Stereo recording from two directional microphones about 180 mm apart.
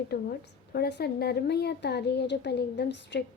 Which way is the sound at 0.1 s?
60° left (ahead or behind).